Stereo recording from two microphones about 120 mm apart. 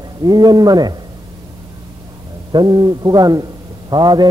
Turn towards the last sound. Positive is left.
turn(degrees=-35)  # may be behind; listen again after turning